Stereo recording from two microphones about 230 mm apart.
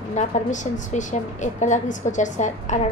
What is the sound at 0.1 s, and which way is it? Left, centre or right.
A woman's voice, left.